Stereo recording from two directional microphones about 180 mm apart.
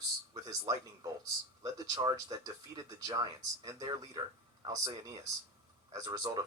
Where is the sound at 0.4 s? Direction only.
20° right (ahead or behind).